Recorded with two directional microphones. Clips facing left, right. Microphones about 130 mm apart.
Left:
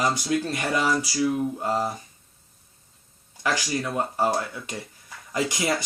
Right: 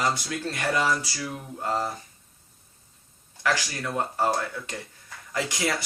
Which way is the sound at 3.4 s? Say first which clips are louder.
Left 1 dB; 20° left (ahead or behind).